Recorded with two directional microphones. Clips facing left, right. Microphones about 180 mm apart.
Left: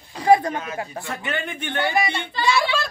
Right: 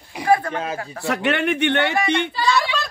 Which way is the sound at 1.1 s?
75° right (ahead or behind).